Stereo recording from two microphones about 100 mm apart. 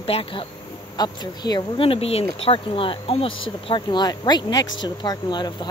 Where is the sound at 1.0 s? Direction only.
45° left (ahead or behind).